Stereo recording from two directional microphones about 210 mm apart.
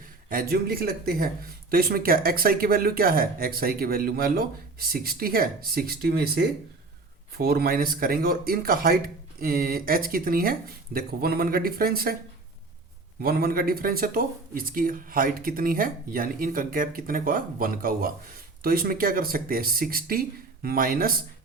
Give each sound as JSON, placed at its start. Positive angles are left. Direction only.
{"t": 0.3, "sound": "speech", "side_deg": -45}
{"t": 13.2, "sound": "speech", "side_deg": -45}